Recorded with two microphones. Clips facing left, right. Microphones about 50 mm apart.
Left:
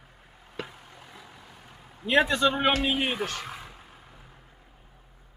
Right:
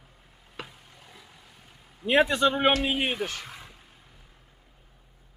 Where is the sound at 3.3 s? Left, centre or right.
Centre.